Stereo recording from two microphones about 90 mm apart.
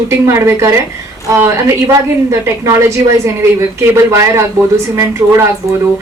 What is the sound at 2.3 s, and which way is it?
A woman's voice, 30° right (ahead or behind).